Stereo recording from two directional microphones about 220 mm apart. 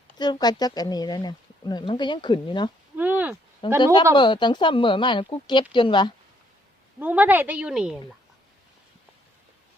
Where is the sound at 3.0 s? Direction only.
5° right (ahead or behind).